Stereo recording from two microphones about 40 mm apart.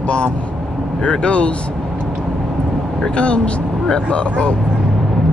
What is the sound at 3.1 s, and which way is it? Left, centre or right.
Speech, left.